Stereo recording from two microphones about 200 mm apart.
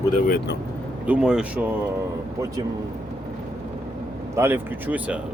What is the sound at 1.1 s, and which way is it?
Speech, 5° right (ahead or behind).